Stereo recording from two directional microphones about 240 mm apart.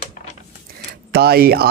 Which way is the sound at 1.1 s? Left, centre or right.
Right.